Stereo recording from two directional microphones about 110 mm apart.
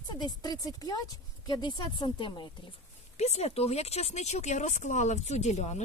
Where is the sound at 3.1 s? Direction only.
80° left.